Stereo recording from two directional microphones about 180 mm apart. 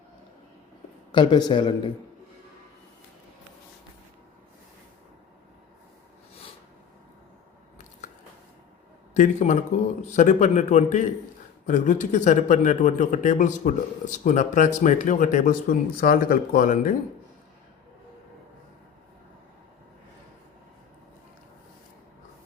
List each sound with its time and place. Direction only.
1.1 s speech: 25° left (ahead or behind)
9.1 s a man's voice: 45° left (ahead or behind)